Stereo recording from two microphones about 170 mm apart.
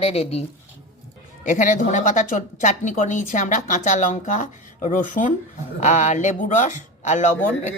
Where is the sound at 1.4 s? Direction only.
50° left (ahead or behind).